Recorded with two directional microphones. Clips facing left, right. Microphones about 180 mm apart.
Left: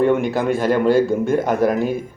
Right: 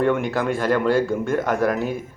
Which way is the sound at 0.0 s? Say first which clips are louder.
Left 3 dB; 20° left (ahead or behind).